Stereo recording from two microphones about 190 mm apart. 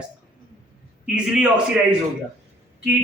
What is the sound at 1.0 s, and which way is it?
A man's voice, 5° right (ahead or behind).